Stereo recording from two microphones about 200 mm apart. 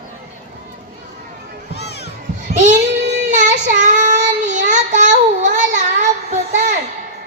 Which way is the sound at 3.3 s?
35° right (ahead or behind).